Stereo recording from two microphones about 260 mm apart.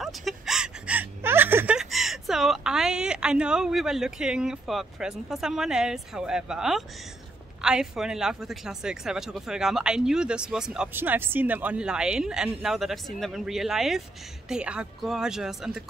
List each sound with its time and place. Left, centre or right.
0.0 s whimper: centre
7.6 s speech: centre